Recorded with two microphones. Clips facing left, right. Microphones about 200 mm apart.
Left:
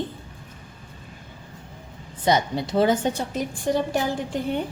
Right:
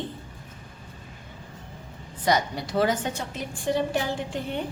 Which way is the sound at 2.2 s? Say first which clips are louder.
Left 3 dB; 25° left (ahead or behind).